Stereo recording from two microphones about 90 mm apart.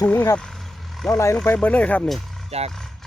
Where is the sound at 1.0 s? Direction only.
Centre (ahead or behind).